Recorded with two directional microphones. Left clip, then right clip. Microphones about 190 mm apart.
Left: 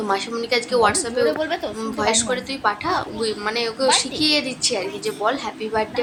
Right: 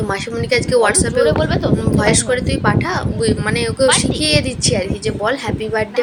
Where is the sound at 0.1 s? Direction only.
10° right (ahead or behind).